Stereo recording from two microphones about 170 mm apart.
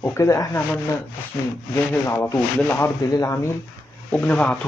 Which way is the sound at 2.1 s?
15° left (ahead or behind).